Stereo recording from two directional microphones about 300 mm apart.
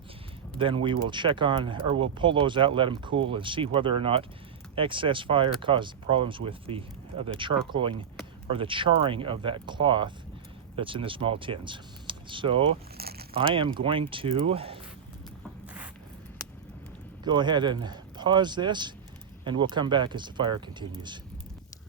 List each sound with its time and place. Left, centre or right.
0.6 s speech: centre
13.0 s a sound: right
13.3 s speech: centre
17.2 s speech: centre